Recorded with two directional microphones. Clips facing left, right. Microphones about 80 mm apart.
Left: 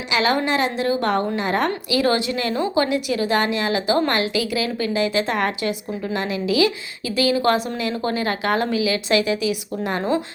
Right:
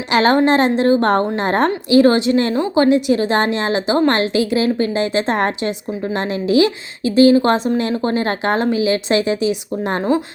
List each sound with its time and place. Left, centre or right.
0.1 s a woman's voice: right